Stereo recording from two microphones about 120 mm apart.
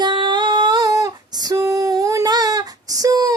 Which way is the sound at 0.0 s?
40° right (ahead or behind).